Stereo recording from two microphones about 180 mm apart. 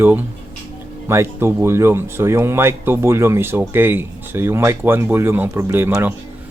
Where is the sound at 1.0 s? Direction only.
15° right (ahead or behind).